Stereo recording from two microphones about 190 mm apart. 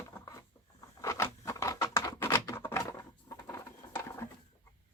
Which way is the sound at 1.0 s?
15° left (ahead or behind).